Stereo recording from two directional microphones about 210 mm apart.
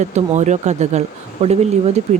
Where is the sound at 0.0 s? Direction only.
35° right (ahead or behind).